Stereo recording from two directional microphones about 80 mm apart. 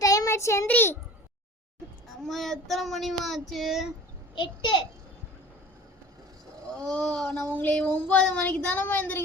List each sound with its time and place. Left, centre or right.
0.0 s child singing: left
0.7 s speech: left
2.0 s child singing: centre
4.4 s a child's voice: left
6.7 s child singing: centre
8.4 s speech: centre